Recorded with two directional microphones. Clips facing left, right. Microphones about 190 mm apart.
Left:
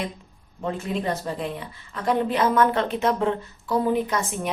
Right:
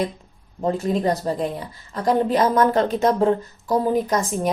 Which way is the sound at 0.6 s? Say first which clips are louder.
Right 6 dB; 40° right (ahead or behind).